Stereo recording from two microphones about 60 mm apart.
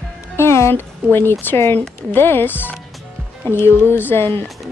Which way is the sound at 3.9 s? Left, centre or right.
Left.